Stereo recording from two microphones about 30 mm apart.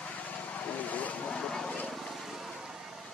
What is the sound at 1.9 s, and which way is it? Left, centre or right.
Vehicle, centre.